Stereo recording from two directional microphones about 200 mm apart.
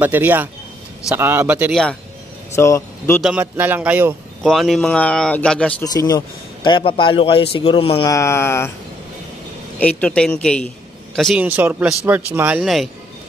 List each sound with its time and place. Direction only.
0.0 s speech: 10° right (ahead or behind)
2.5 s speech: 15° left (ahead or behind)
3.2 s speech: 5° right (ahead or behind)
5.9 s a man's voice: 20° left (ahead or behind)
8.1 s speech: 15° left (ahead or behind)
9.8 s speech: 5° left (ahead or behind)